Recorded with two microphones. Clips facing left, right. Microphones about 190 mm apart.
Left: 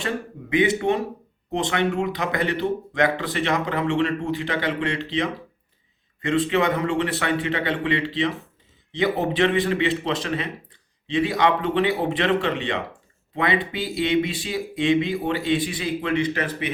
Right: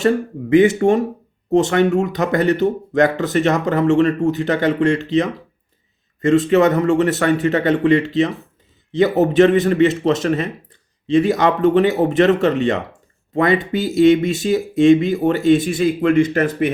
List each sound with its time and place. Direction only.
0.5 s speech: 45° right (ahead or behind)